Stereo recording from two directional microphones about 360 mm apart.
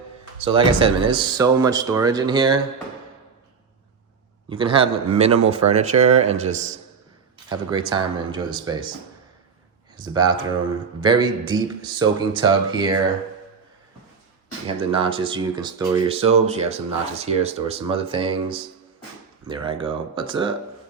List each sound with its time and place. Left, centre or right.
0.4 s speech: centre
4.4 s speech: centre
10.1 s speech: centre
14.9 s speech: centre